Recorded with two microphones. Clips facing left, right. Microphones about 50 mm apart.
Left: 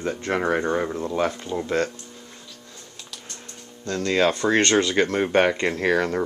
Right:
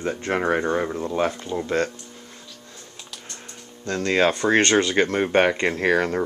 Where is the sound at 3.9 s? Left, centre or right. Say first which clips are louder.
Right 1 dB; right.